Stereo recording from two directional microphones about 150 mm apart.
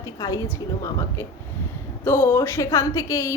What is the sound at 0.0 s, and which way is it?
A woman's voice, 20° left (ahead or behind).